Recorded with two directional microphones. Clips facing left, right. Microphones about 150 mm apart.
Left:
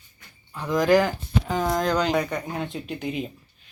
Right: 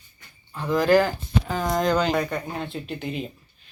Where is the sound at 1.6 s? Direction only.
Centre (ahead or behind).